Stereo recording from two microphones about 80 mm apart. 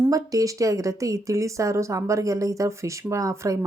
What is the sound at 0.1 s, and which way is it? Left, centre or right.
Speech, right.